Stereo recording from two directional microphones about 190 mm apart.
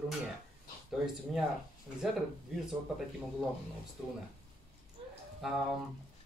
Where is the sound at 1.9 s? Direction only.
Centre (ahead or behind).